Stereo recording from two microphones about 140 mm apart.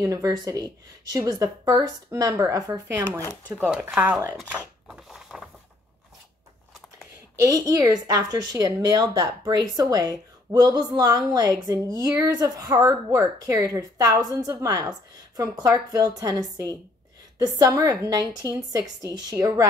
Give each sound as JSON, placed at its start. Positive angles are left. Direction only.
{"t": 0.0, "sound": "a woman's voice", "side_deg": -25}
{"t": 3.0, "sound": "speech", "side_deg": 10}
{"t": 3.6, "sound": "speech", "side_deg": -10}
{"t": 4.8, "sound": "a sound", "side_deg": -5}
{"t": 7.3, "sound": "a woman's voice", "side_deg": -25}